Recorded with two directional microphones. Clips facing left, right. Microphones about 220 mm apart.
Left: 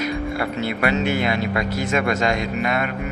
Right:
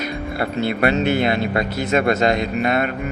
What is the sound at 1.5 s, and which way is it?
A man's voice, 30° right (ahead or behind).